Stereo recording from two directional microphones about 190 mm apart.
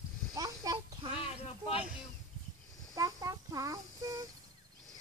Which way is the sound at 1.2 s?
30° left (ahead or behind).